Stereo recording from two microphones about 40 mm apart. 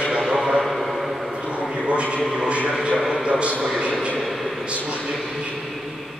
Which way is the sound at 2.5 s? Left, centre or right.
Right.